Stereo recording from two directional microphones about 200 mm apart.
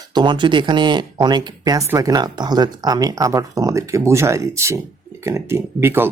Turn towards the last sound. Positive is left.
turn(degrees=-10)  # may be behind; listen again after turning